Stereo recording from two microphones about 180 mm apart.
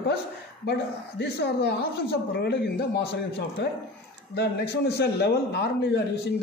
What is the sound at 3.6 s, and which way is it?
A man's voice, 70° left (ahead or behind).